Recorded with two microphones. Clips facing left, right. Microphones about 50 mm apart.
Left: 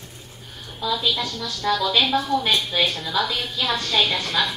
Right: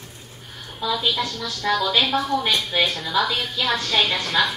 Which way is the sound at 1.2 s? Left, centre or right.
Right.